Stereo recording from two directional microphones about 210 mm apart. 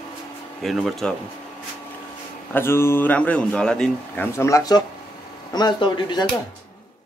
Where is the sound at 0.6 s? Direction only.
Centre (ahead or behind).